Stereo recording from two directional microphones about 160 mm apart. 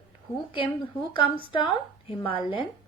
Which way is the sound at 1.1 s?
30° left (ahead or behind).